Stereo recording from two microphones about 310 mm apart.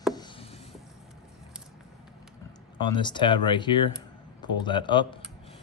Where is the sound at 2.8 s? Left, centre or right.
Centre.